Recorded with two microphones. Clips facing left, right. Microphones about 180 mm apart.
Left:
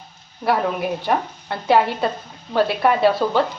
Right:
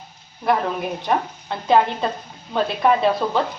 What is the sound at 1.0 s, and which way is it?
Speech, 5° left (ahead or behind).